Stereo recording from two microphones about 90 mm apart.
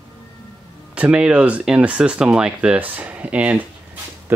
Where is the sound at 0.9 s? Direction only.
15° right (ahead or behind).